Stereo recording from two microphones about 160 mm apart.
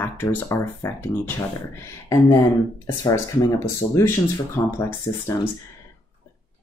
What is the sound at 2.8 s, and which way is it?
Speech, 15° left (ahead or behind).